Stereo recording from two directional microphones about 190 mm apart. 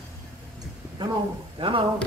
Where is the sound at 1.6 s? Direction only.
25° right (ahead or behind).